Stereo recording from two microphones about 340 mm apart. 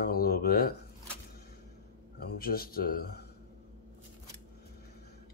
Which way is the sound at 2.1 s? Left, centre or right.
Left.